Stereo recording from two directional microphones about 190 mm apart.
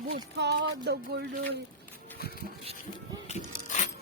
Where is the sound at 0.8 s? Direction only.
60° right (ahead or behind).